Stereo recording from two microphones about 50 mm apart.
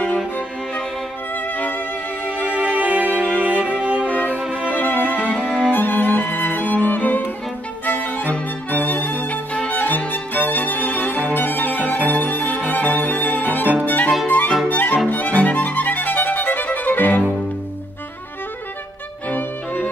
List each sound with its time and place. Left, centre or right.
1.3 s music: left
2.8 s music: right
4.4 s violin: right
4.7 s violin: left
5.0 s music: right
5.4 s music: centre
5.8 s music: left
6.5 s violin: left
11.3 s violin: left
13.8 s music: left
14.7 s violin: left
19.2 s music: left